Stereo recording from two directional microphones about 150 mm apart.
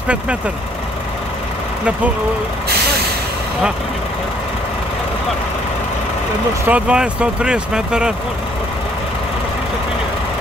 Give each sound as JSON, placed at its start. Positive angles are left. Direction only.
{"t": 6.7, "sound": "speech", "side_deg": -5}